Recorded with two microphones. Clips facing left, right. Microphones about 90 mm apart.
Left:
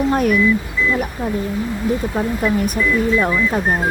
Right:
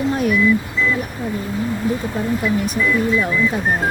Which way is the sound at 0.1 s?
50° left (ahead or behind).